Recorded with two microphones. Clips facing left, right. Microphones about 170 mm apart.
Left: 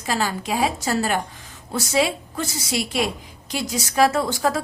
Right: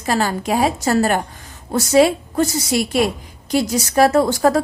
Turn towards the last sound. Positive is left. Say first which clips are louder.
# right 7 dB
turn(degrees=-45)  # may be behind; listen again after turning